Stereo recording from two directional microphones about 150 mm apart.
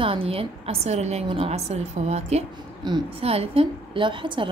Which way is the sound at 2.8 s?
35° right (ahead or behind).